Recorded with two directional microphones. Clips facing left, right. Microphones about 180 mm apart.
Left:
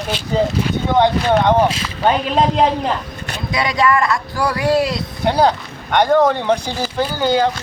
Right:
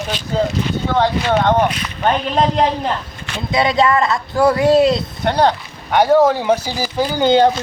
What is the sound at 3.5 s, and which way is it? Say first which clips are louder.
Speech: right 2 dB; 25° right (ahead or behind).